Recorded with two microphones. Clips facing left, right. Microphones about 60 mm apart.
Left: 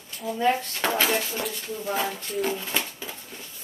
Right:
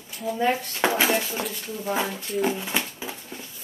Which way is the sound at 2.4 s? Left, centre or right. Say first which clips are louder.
Right 2 dB; centre.